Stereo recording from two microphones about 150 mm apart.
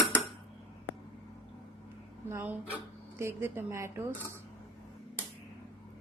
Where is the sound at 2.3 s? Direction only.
10° right (ahead or behind).